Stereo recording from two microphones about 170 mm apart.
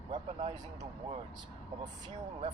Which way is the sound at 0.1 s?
40° right (ahead or behind).